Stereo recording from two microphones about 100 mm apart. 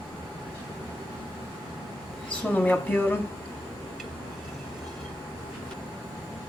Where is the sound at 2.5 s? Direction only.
15° left (ahead or behind).